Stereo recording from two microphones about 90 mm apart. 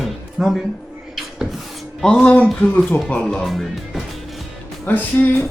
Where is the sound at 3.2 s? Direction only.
5° left (ahead or behind).